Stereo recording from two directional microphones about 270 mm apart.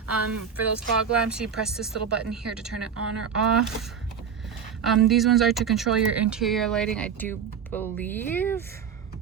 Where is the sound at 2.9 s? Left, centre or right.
Right.